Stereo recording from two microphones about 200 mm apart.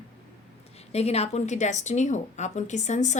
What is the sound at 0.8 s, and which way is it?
A woman's voice, 30° left (ahead or behind).